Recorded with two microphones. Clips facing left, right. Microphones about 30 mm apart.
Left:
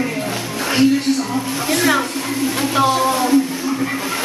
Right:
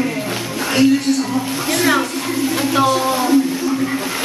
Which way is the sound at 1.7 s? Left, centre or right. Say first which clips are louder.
Even; centre.